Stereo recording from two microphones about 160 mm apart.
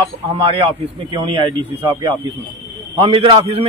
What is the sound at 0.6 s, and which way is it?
A man's voice, 35° right (ahead or behind).